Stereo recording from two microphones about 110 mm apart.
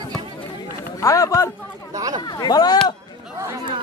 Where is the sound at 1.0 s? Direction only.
30° left (ahead or behind).